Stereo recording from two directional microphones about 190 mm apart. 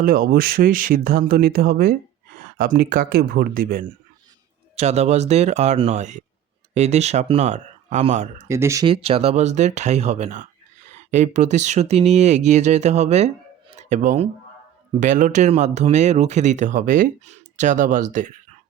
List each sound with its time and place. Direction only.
0.0 s speech: 50° right (ahead or behind)
4.8 s speech: 35° right (ahead or behind)
8.4 s speech: 15° right (ahead or behind)
8.9 s speech: 30° right (ahead or behind)